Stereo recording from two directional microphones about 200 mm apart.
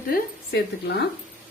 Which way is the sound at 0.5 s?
55° left (ahead or behind).